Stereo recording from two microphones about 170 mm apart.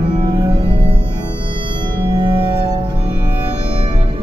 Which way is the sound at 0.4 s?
25° right (ahead or behind).